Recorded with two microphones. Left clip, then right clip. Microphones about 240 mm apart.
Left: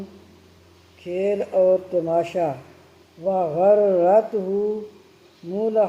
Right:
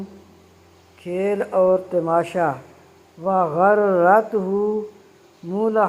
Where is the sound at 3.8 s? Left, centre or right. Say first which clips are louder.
Right 2 dB; centre.